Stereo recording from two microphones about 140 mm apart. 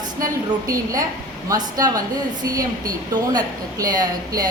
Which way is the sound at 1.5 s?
25° right (ahead or behind).